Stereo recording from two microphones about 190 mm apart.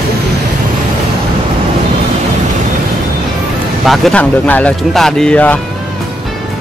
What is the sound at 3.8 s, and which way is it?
Speech, centre (ahead or behind).